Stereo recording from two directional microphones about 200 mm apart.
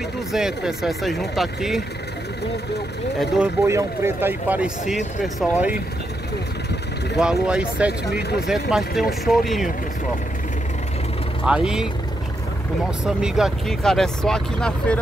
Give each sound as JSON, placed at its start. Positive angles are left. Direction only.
{"t": 0.3, "sound": "speech", "side_deg": -5}
{"t": 3.6, "sound": "speech", "side_deg": -15}
{"t": 7.2, "sound": "speech", "side_deg": -5}
{"t": 8.1, "sound": "speech", "side_deg": 55}
{"t": 8.5, "sound": "speech", "side_deg": 0}
{"t": 11.4, "sound": "speech", "side_deg": -5}
{"t": 13.0, "sound": "speech", "side_deg": -5}